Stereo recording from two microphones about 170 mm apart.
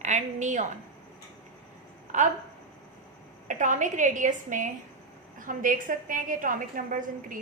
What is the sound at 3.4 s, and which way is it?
A woman's voice, 50° right (ahead or behind).